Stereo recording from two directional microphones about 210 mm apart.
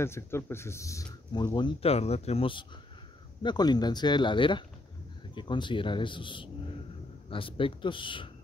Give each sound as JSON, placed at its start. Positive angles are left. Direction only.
{"t": 0.0, "sound": "speech", "side_deg": 10}